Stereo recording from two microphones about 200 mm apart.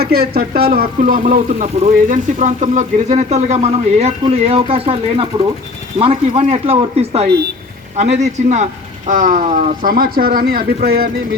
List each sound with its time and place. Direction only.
0.0 s speech: 50° right (ahead or behind)